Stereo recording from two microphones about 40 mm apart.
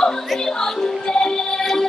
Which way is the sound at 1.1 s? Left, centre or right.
Centre.